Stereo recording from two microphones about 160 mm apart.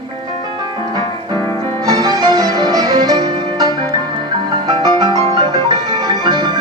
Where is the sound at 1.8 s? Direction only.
25° right (ahead or behind).